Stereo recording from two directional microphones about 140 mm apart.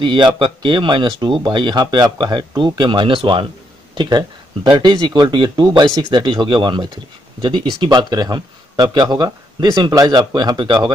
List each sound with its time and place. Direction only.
0.0 s speech: 35° right (ahead or behind)